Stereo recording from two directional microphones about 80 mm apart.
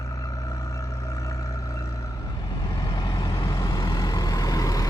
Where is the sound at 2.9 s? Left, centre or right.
Left.